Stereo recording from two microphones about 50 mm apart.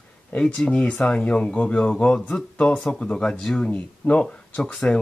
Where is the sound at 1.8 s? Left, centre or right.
Centre.